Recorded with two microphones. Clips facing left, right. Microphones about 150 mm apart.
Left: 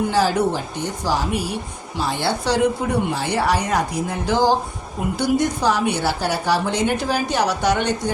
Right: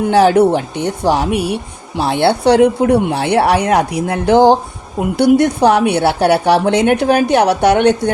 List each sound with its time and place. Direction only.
0.1 s a woman's voice: 65° right (ahead or behind)